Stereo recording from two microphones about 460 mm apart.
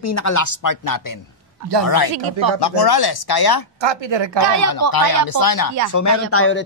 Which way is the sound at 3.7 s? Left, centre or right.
Right.